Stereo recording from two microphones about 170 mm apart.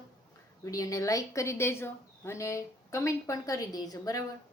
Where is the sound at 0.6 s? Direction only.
20° left (ahead or behind).